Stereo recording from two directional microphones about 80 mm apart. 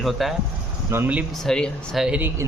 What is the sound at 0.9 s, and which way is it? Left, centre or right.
Speech, right.